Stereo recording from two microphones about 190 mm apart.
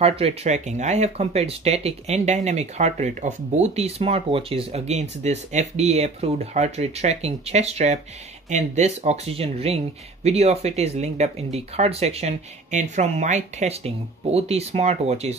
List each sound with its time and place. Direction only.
0.0 s speech: 30° right (ahead or behind)